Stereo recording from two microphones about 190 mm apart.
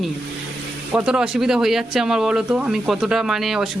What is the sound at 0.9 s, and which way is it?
Speech, 5° right (ahead or behind).